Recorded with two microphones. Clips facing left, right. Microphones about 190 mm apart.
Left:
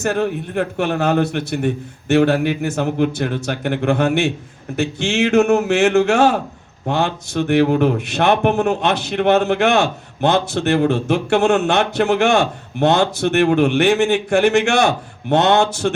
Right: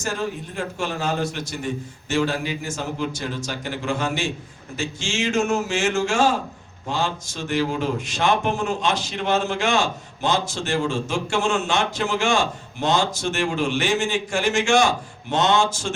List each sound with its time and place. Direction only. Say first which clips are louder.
0.0 s speech: left 8 dB; 60° left (ahead or behind)